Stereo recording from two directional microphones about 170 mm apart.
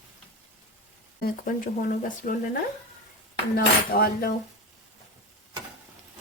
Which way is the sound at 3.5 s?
60° left (ahead or behind).